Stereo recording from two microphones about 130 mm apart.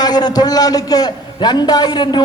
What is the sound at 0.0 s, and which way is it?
A man's voice, 30° left (ahead or behind).